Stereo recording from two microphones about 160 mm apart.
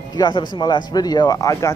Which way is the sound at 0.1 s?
30° left (ahead or behind).